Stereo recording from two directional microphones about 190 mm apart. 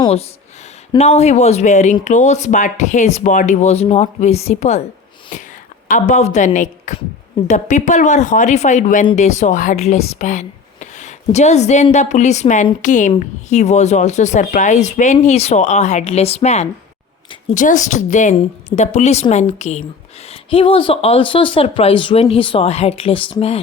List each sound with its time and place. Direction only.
0.0 s speech: 30° left (ahead or behind)